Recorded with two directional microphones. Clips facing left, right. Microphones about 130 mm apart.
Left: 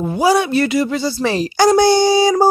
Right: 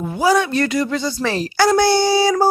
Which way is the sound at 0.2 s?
10° left (ahead or behind).